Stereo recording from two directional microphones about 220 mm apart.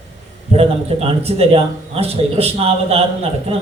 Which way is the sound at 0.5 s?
30° right (ahead or behind).